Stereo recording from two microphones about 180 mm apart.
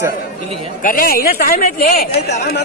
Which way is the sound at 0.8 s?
50° left (ahead or behind).